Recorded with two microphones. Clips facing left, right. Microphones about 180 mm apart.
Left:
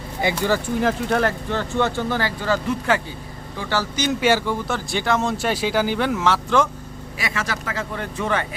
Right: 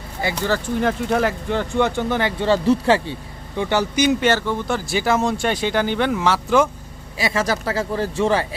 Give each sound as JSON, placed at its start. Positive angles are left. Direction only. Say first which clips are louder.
{"t": 0.2, "sound": "speech", "louder": "left 1 dB", "side_deg": 15}
{"t": 0.8, "sound": "speech", "louder": "right 3 dB", "side_deg": 0}
{"t": 1.5, "sound": "speech", "louder": "right 2 dB", "side_deg": -15}
{"t": 3.6, "sound": "speech", "louder": "right 5 dB", "side_deg": -20}
{"t": 4.2, "sound": "speech", "louder": "even", "side_deg": 10}
{"t": 4.7, "sound": "speech", "louder": "right 4 dB", "side_deg": -5}
{"t": 7.2, "sound": "a man's voice", "louder": "right 6 dB", "side_deg": -35}